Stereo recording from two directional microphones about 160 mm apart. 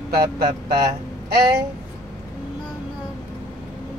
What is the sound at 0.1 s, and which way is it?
Speech, 75° right (ahead or behind).